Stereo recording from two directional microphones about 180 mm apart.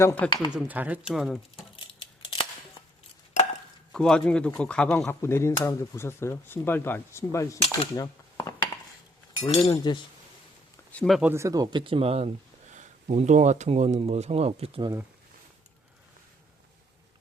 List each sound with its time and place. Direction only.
0.0 s speech: 10° left (ahead or behind)
0.5 s speech: 10° right (ahead or behind)
1.7 s scissors: 30° left (ahead or behind)
3.9 s speech: 5° left (ahead or behind)
7.9 s a sound: 20° left (ahead or behind)
9.4 s speech: 35° left (ahead or behind)
9.7 s speech: 25° left (ahead or behind)
10.9 s speech: centre (ahead or behind)
11.3 s speech: 15° right (ahead or behind)